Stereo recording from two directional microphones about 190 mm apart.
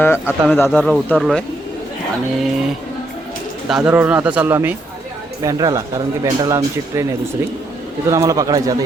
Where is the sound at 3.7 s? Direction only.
5° right (ahead or behind).